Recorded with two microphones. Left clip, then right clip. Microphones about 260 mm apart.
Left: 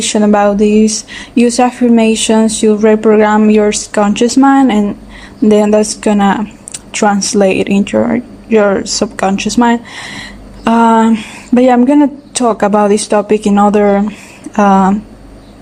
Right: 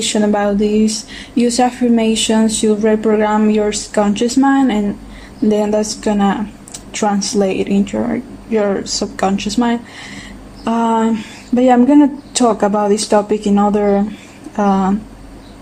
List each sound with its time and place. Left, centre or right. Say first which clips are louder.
0.0 s speech: left 5 dB; left